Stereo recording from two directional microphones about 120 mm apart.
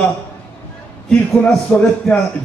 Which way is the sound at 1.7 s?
10° left (ahead or behind).